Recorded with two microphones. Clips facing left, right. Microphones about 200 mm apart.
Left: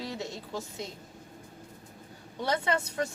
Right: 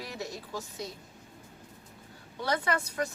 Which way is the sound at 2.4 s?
25° left (ahead or behind).